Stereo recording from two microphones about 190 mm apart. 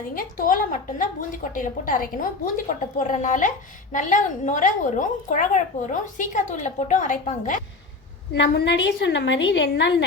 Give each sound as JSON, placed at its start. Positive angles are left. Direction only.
{"t": 0.2, "sound": "a woman's voice", "side_deg": 45}
{"t": 8.3, "sound": "a woman's voice", "side_deg": 60}